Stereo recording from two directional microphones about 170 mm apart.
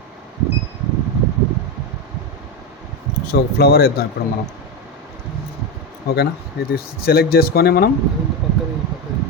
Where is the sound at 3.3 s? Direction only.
65° left (ahead or behind).